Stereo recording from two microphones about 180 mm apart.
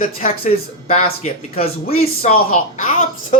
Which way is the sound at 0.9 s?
40° left (ahead or behind).